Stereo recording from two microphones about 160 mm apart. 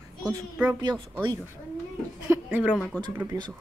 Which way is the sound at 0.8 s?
30° right (ahead or behind).